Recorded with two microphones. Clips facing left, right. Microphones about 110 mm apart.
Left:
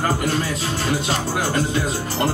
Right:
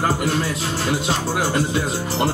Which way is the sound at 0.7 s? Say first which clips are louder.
Even; 10° right (ahead or behind).